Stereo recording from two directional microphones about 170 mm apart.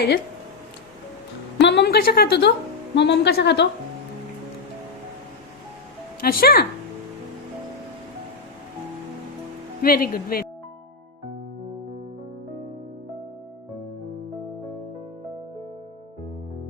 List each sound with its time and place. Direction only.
1.5 s a sound: 80° left
2.9 s a woman's voice: 90° left
6.2 s speech: 60° left (ahead or behind)
9.8 s speech: 60° left (ahead or behind)